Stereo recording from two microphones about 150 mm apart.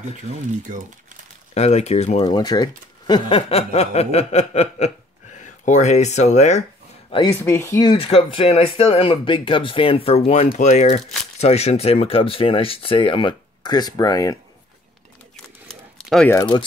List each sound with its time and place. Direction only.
1.5 s snicker: 45° left (ahead or behind)
2.2 s speech: 30° left (ahead or behind)
3.3 s snicker: 40° left (ahead or behind)
7.2 s speech: 15° left (ahead or behind)
8.0 s speech: 40° left (ahead or behind)
10.6 s snicker: 50° left (ahead or behind)
11.4 s speech: 45° left (ahead or behind); by 14.4 s 25° left (ahead or behind)
15.7 s a sound: centre (ahead or behind)